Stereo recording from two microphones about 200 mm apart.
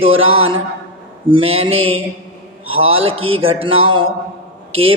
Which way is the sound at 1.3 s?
30° right (ahead or behind).